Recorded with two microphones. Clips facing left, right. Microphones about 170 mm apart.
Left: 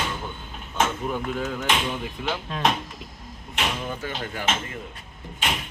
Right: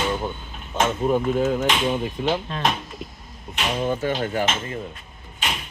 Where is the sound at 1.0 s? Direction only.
25° right (ahead or behind).